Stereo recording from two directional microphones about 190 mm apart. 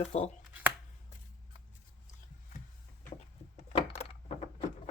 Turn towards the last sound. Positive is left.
turn(degrees=35)  # may be behind; listen again after turning